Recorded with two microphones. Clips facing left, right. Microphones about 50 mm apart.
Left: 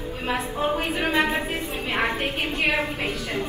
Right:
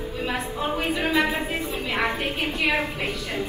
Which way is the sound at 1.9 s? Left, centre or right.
Left.